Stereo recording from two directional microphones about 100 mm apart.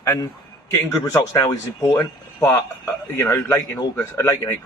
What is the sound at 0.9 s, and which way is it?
Speech, 25° left (ahead or behind).